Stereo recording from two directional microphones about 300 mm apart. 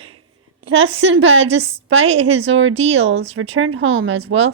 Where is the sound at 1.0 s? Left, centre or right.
Right.